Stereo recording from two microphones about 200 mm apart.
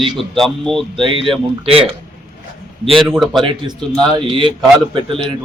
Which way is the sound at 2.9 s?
Centre (ahead or behind).